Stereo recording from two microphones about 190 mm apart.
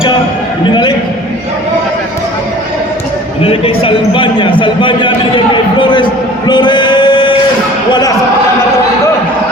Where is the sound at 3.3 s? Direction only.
30° left (ahead or behind).